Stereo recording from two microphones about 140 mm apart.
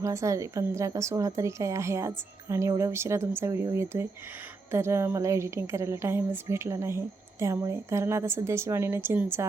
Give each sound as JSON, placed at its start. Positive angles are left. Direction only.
{"t": 0.0, "sound": "a woman's voice", "side_deg": -20}